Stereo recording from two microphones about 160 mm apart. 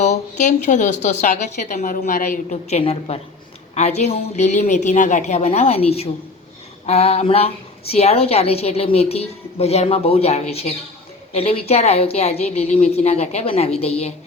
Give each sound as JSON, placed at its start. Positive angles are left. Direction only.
{"t": 0.0, "sound": "a woman's voice", "side_deg": 45}